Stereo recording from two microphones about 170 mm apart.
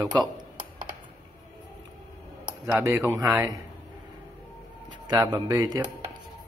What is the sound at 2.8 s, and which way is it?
Speech, 20° right (ahead or behind).